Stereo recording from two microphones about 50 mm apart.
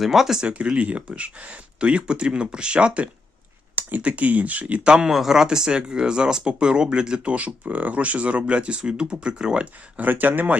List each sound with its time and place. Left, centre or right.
0.0 s speech: centre
0.4 s speech: right
4.6 s speech: right
7.3 s speech: right
10.0 s speech: right